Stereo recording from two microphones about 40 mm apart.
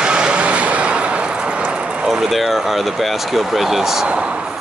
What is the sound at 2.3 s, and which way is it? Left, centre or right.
Speech, centre.